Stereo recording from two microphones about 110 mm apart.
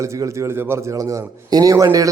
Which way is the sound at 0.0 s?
25° right (ahead or behind).